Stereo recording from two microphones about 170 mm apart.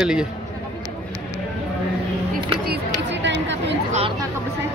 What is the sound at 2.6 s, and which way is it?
Chatter, 70° right (ahead or behind).